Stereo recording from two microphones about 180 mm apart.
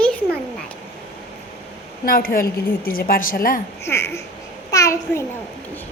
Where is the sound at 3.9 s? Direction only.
15° left (ahead or behind).